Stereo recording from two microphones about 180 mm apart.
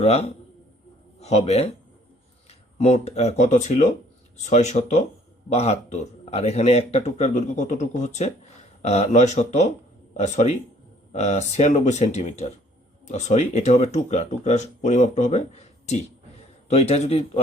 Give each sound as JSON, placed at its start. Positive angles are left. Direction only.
{"t": 0.0, "sound": "speech", "side_deg": 35}